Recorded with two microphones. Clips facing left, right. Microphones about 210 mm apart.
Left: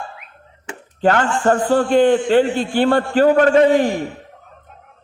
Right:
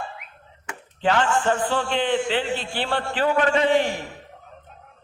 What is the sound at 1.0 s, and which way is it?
A man's voice, 45° left (ahead or behind).